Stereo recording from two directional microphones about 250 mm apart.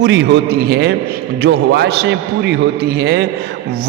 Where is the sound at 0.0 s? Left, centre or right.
Right.